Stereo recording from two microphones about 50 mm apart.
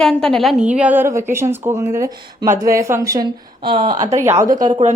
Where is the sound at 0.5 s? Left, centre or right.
Right.